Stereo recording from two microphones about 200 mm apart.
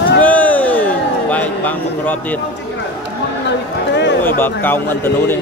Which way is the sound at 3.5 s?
60° left (ahead or behind).